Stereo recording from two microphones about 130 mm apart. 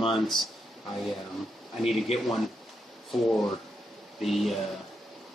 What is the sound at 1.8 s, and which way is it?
Speech, centre (ahead or behind).